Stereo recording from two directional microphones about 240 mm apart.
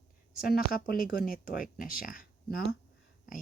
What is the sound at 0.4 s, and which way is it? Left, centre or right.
Speech, left.